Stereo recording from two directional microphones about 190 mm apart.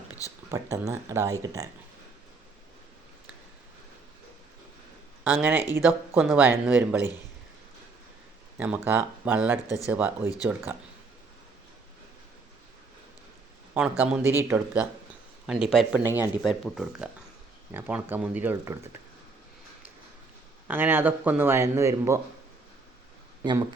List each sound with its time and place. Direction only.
0.2 s speech: 15° left (ahead or behind)
0.5 s speech: 15° right (ahead or behind)
5.2 s speech: 10° right (ahead or behind)
8.5 s speech: 10° right (ahead or behind)
14.0 s speech: 10° right (ahead or behind)
16.0 s speech: 10° right (ahead or behind)
16.4 s speech: centre (ahead or behind); by 18.8 s 15° right (ahead or behind)
20.7 s speech: 10° right (ahead or behind)
23.4 s speech: 20° right (ahead or behind)